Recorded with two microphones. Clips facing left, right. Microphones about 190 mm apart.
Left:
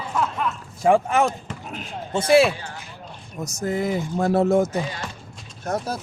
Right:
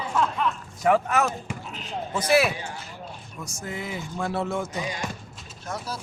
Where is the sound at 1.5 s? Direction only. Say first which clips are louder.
Right 1 dB; 10° right (ahead or behind).